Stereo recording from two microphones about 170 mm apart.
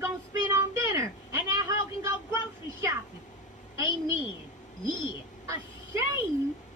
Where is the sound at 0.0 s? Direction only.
15° right (ahead or behind).